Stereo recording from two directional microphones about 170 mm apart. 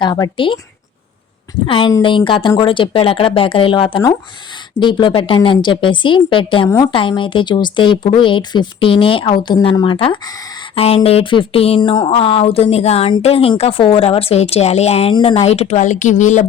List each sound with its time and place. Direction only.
0.0 s speech: 25° left (ahead or behind)
1.6 s speech: 30° left (ahead or behind)